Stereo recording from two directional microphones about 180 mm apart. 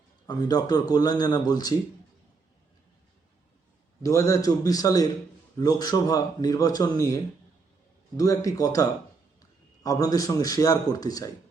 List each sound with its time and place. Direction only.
0.3 s a man's voice: 20° left (ahead or behind)
4.0 s a man's voice: 15° left (ahead or behind)